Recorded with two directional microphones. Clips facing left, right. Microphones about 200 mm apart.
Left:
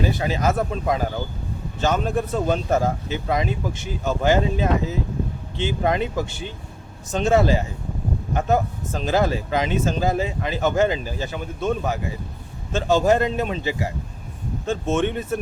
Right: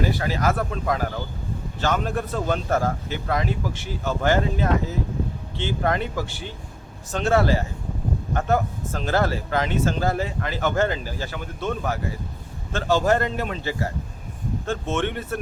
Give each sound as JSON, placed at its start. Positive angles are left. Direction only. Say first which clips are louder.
{"t": 0.2, "sound": "speech", "louder": "left 2 dB", "side_deg": 20}
{"t": 14.9, "sound": "speech", "louder": "left 4 dB", "side_deg": 20}